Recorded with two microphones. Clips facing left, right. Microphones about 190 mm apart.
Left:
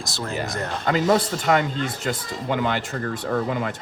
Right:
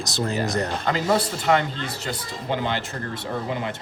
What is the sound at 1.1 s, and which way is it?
Speech, 50° left (ahead or behind).